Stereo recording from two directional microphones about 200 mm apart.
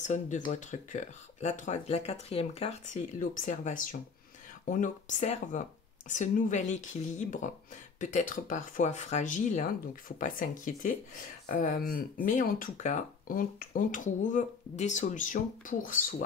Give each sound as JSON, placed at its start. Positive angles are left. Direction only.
{"t": 0.0, "sound": "speech", "side_deg": 35}